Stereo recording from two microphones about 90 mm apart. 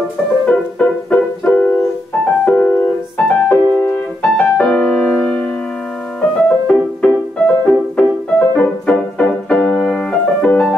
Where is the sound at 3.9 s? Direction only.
10° left (ahead or behind).